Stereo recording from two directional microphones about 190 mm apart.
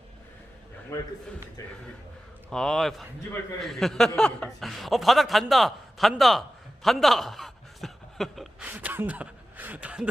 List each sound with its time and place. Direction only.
0.9 s a man's voice: 15° left (ahead or behind)
2.5 s speech: 5° left (ahead or behind)
6.8 s a sound: centre (ahead or behind)